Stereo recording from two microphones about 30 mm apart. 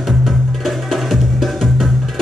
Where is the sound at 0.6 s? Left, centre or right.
Centre.